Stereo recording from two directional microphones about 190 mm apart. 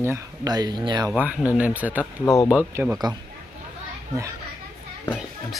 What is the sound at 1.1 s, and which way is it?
Speech, 5° right (ahead or behind).